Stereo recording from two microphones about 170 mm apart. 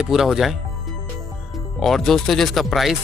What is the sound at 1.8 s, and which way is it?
Speech, centre (ahead or behind).